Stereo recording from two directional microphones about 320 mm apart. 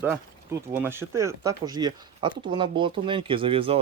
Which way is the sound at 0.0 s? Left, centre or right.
Centre.